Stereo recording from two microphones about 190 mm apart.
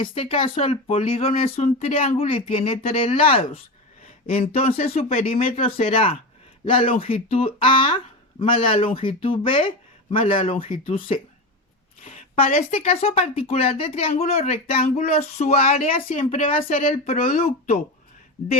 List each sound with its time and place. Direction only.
0.0 s speech: 30° left (ahead or behind)
12.0 s speech: 35° left (ahead or behind)